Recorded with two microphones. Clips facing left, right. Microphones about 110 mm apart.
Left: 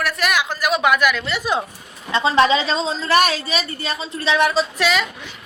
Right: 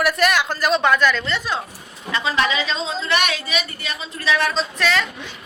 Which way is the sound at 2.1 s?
30° left (ahead or behind).